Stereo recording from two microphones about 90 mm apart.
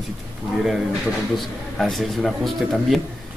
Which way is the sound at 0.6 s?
5° right (ahead or behind).